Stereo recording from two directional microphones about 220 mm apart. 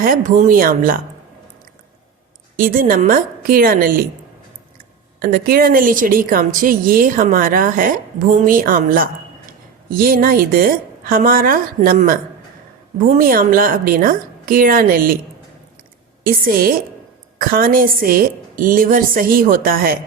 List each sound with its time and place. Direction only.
0.0 s a woman's voice: 35° right (ahead or behind)
2.6 s a woman's voice: 40° right (ahead or behind)
5.2 s a woman's voice: 40° right (ahead or behind)
16.2 s a woman's voice: 40° right (ahead or behind)